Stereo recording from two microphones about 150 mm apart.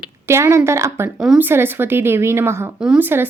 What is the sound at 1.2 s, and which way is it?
A woman's voice, 10° right (ahead or behind).